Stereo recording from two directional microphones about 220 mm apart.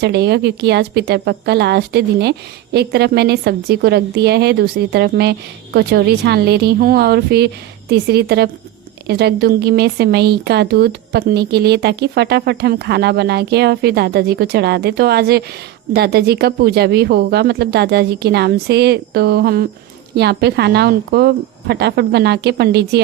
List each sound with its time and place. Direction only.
0.0 s speech: 50° right (ahead or behind)